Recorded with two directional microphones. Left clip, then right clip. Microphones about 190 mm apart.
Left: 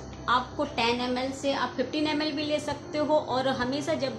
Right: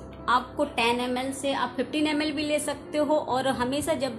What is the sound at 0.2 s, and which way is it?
A woman's voice, 40° right (ahead or behind).